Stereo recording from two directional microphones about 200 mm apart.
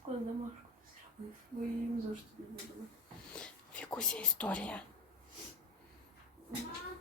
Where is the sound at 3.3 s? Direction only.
5° left (ahead or behind).